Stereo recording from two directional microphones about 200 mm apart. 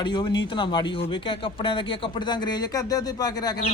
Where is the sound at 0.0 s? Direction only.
20° left (ahead or behind).